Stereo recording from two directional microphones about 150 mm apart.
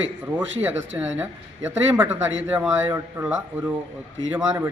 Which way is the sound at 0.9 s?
10° right (ahead or behind).